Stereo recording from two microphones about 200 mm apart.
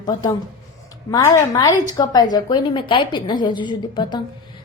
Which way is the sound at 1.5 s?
20° left (ahead or behind).